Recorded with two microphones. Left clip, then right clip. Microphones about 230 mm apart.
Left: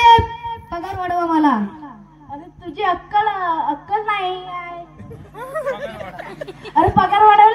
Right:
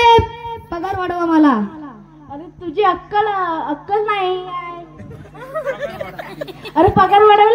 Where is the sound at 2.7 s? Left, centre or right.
Left.